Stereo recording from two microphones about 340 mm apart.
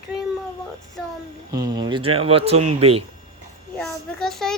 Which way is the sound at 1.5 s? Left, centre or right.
Centre.